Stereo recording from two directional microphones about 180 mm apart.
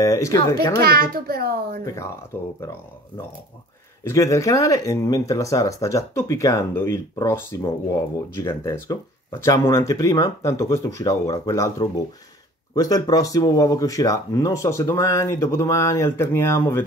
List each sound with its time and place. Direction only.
0.0 s speech: 15° left (ahead or behind)
0.7 s a child's voice: 55° right (ahead or behind)
4.0 s speech: 15° left (ahead or behind)